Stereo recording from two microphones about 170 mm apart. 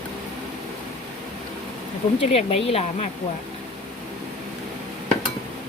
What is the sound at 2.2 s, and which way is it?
Speech, 35° left (ahead or behind).